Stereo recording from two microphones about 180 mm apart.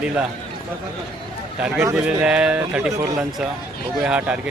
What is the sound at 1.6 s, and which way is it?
Speech, 10° right (ahead or behind).